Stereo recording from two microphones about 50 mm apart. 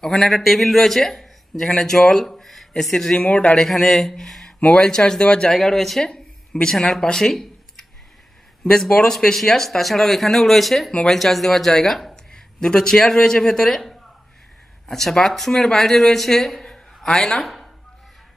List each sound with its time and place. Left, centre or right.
0.0 s a man's voice: centre
3.2 s a man's voice: left
3.5 s speech: centre
5.6 s speech: centre
16.7 s a sound: centre